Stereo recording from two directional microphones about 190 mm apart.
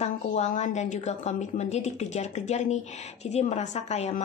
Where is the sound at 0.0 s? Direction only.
40° left (ahead or behind).